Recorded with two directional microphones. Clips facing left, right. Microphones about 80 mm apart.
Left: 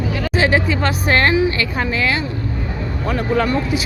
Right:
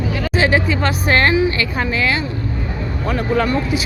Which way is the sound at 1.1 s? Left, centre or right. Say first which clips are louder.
Even; centre.